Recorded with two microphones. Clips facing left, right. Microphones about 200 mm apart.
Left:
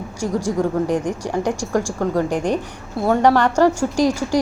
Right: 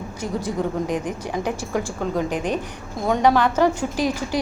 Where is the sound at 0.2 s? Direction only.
10° left (ahead or behind).